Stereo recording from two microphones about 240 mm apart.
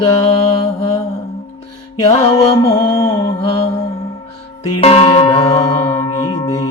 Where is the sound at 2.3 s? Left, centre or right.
Centre.